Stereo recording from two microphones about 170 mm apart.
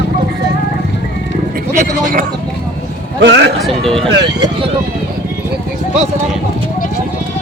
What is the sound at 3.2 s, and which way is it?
Speech, 90° right.